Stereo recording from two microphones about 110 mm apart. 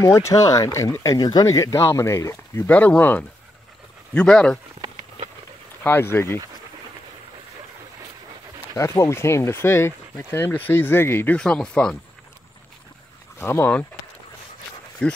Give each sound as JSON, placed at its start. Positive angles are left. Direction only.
{"t": 0.3, "sound": "speech", "side_deg": 35}
{"t": 5.9, "sound": "speech", "side_deg": 20}
{"t": 8.7, "sound": "speech", "side_deg": 25}
{"t": 11.3, "sound": "speech", "side_deg": 5}
{"t": 13.4, "sound": "speech", "side_deg": 20}
{"t": 15.0, "sound": "speech", "side_deg": 10}